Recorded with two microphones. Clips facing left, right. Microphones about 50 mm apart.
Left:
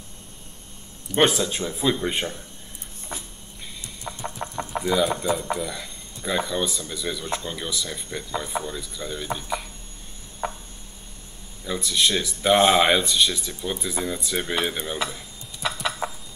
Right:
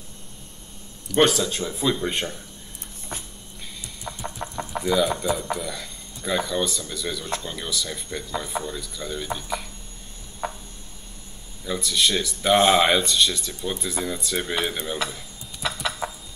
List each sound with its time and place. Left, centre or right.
1.1 s speech: left
1.8 s speech: centre
4.1 s chicken: centre
5.6 s a sound: centre
6.5 s speech: centre
10.4 s a sound: left
11.6 s speech: centre
12.5 s speech: centre
12.8 s speech: centre
15.1 s a sound: centre